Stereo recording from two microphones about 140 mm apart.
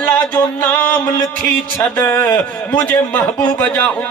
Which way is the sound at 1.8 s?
15° left (ahead or behind).